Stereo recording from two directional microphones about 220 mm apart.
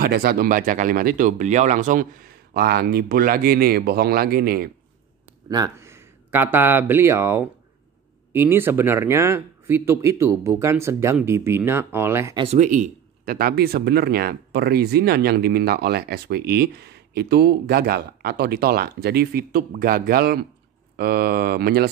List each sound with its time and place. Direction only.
0.0 s speech: 45° right (ahead or behind)
5.5 s speech: 15° right (ahead or behind)
12.4 s speech: 35° right (ahead or behind)